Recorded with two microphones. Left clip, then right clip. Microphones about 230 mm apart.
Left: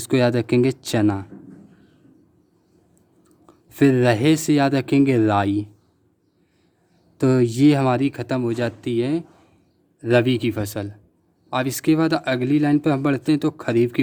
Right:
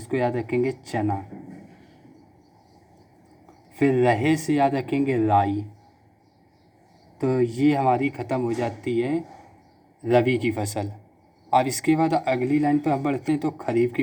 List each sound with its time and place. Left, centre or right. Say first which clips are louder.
0.1 s speech: left 5 dB; left
3.4 s speech: left 5 dB; left
7.2 s speech: left 5 dB; left